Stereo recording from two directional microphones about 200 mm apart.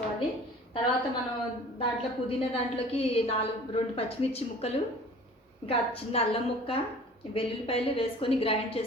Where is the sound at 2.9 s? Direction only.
30° left (ahead or behind).